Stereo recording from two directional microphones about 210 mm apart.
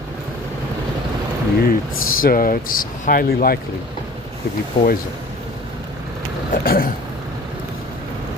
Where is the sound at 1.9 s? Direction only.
75° left (ahead or behind).